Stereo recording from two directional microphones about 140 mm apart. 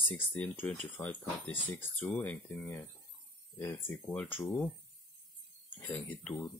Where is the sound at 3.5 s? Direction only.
15° left (ahead or behind).